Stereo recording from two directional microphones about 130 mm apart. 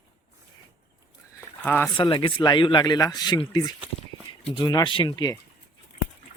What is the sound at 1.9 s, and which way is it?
Speech, 40° left (ahead or behind).